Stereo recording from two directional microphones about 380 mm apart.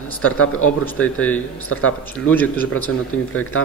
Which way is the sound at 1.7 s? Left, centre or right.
Left.